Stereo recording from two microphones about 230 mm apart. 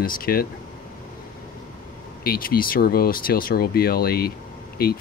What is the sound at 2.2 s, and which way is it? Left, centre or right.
Speech, left.